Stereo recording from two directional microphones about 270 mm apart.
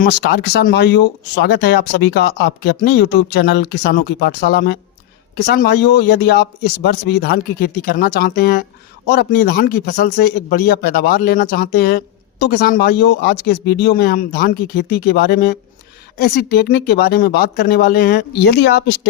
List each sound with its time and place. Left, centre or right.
0.0 s a man's voice: left